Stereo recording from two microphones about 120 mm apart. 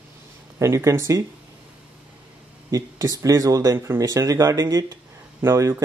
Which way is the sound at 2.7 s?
30° right (ahead or behind).